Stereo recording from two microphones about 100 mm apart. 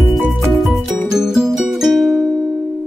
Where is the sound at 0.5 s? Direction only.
Centre (ahead or behind).